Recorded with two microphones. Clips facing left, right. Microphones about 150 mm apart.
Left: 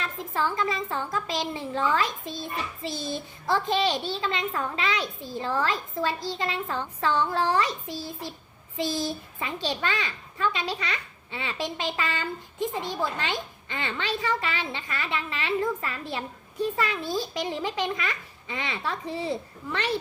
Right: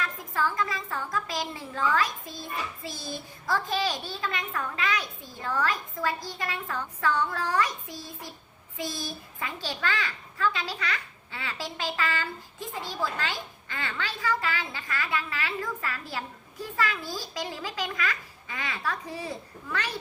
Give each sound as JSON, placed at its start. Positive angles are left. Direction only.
{"t": 0.0, "sound": "a child's voice", "side_deg": 25}